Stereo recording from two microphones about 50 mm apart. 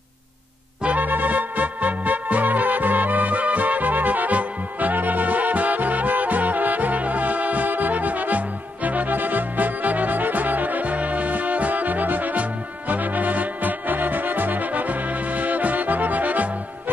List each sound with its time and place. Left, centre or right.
0.8 s music: right